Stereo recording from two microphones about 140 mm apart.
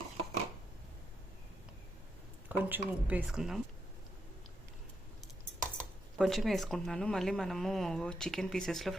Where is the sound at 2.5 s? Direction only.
10° right (ahead or behind).